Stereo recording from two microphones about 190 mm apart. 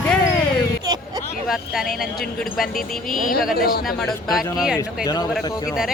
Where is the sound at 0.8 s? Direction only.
20° right (ahead or behind).